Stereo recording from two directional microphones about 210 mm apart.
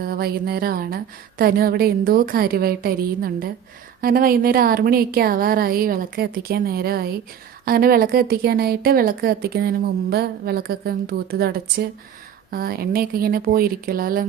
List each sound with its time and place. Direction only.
0.0 s speech: 45° right (ahead or behind)